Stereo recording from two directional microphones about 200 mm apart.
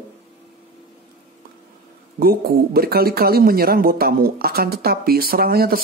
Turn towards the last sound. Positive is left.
turn(degrees=-50)  # may be behind; listen again after turning